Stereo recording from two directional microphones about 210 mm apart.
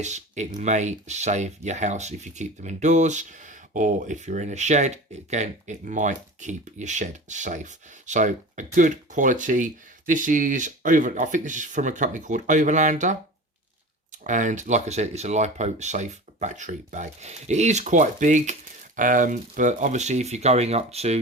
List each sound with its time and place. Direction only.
0.0 s speech: 35° right (ahead or behind)